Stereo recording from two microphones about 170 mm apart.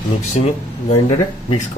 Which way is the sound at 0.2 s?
40° left (ahead or behind).